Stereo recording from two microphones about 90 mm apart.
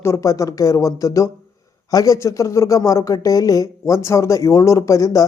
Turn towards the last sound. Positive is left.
turn(degrees=35)  # may be behind; listen again after turning